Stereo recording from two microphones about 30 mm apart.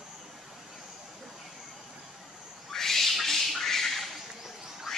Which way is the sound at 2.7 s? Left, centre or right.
Centre.